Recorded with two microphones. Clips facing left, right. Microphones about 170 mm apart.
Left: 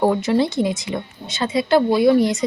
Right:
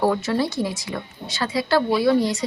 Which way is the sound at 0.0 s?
20° left (ahead or behind).